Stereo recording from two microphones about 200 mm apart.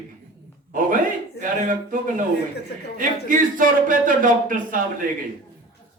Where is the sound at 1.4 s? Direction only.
40° right (ahead or behind).